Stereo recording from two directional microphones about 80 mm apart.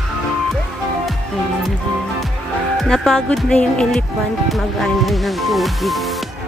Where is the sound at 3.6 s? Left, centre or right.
Centre.